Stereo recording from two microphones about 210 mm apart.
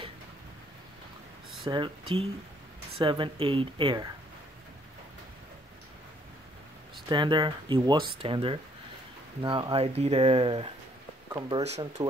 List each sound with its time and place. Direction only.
1.6 s speech: 25° right (ahead or behind)
7.1 s speech: 20° right (ahead or behind)